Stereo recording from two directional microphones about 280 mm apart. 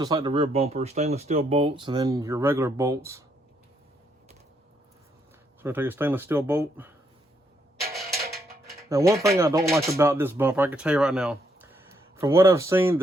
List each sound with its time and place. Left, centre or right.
0.0 s speech: centre
5.6 s speech: centre
7.8 s music: centre
8.9 s speech: centre